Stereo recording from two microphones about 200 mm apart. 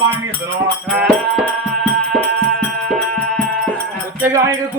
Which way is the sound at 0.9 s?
Centre (ahead or behind).